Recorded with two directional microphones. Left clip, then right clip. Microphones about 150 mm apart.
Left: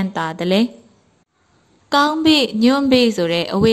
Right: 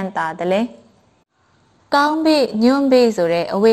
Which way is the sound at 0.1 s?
20° left (ahead or behind).